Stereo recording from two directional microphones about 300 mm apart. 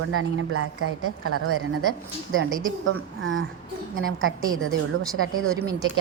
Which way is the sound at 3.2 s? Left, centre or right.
Right.